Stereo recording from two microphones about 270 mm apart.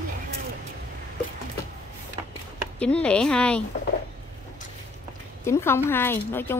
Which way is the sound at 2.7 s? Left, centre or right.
Centre.